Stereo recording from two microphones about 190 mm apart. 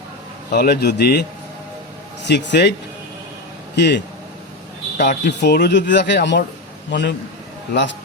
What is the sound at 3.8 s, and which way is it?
Speech, 65° left (ahead or behind).